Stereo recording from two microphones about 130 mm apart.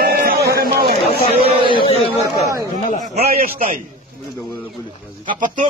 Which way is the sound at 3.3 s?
90° right.